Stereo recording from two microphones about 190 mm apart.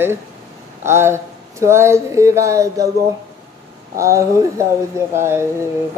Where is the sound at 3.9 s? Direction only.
15° right (ahead or behind).